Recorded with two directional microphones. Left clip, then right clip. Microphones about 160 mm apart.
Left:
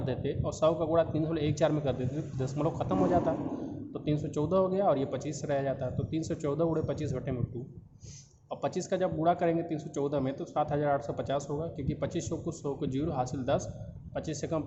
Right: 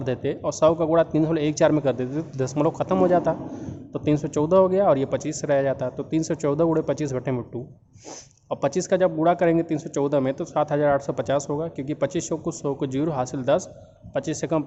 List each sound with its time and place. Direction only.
0.0 s speech: 60° right (ahead or behind)
8.4 s speech: 60° right (ahead or behind)